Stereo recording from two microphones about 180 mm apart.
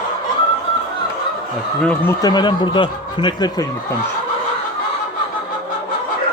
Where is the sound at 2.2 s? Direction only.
25° left (ahead or behind).